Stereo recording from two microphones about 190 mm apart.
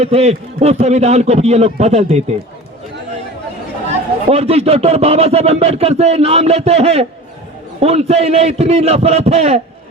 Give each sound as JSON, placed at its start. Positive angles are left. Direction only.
{"t": 0.0, "sound": "speech", "side_deg": -35}
{"t": 4.3, "sound": "speech", "side_deg": -30}